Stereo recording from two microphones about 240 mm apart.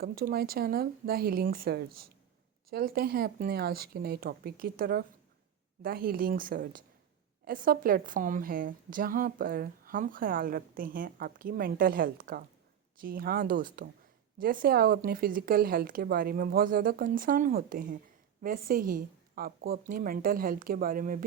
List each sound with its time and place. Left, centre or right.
0.0 s a woman's voice: right